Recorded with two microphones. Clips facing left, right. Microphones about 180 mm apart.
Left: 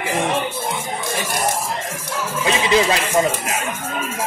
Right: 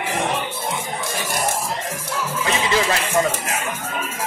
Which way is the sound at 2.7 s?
15° left (ahead or behind).